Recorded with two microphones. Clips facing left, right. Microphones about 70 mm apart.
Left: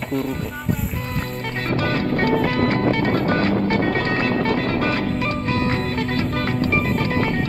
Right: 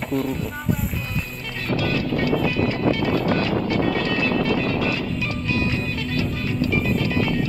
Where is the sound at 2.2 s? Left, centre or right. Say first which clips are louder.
Left 3 dB; left.